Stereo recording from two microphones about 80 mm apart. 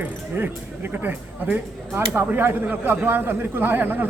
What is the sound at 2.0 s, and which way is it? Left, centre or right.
A man's voice, right.